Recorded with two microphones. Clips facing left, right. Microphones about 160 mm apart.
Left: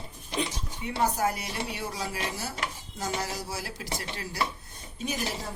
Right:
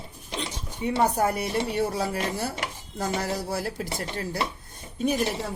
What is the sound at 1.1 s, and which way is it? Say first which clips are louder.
Speech: right 5 dB; 55° right (ahead or behind).